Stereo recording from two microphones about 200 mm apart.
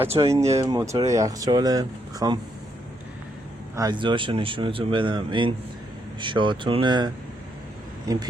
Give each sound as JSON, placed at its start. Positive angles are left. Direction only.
{"t": 0.2, "sound": "speech", "side_deg": -15}
{"t": 3.8, "sound": "speech", "side_deg": -20}